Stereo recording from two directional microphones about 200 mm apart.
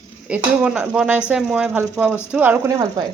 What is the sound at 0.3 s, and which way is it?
Speech, 5° right (ahead or behind).